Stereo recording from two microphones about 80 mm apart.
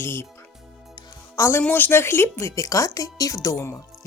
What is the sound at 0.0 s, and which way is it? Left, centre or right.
Speech, left.